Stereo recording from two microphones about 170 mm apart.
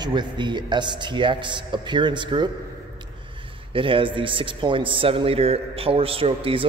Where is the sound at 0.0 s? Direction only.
25° right (ahead or behind).